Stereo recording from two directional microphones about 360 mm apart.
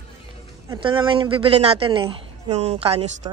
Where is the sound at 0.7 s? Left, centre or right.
Centre.